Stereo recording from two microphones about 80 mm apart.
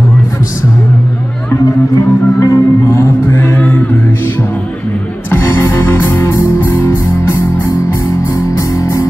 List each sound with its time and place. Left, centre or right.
2.0 s music: left
5.3 s music: left
8.5 s music: left